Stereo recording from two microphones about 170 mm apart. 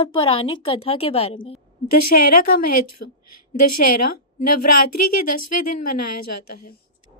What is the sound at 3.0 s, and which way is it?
Speech, 70° left (ahead or behind).